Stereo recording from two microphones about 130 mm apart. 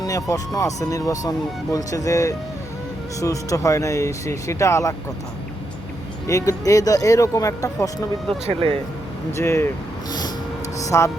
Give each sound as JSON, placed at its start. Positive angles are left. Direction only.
{"t": 0.0, "sound": "speech", "side_deg": 25}
{"t": 6.2, "sound": "speech", "side_deg": 25}
{"t": 8.4, "sound": "speech", "side_deg": -45}
{"t": 9.3, "sound": "speech", "side_deg": 20}
{"t": 10.1, "sound": "vehicle", "side_deg": 30}
{"t": 10.8, "sound": "a sound", "side_deg": 25}